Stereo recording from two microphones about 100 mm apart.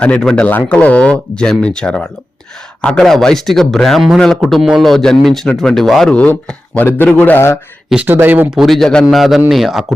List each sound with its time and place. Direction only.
0.0 s speech: 10° left (ahead or behind)
6.1 s a man's voice: 15° left (ahead or behind)
8.0 s speech: 20° right (ahead or behind)
8.4 s speech: centre (ahead or behind)